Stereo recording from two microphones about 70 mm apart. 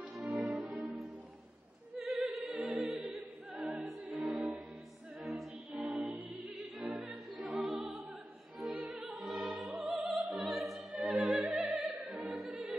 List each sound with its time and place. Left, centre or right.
0.1 s music: centre
2.0 s opera: centre
5.2 s music: centre
6.0 s music: right
7.4 s opera: centre
8.6 s opera: right
8.9 s opera: centre
9.5 s music: centre
11.9 s opera: centre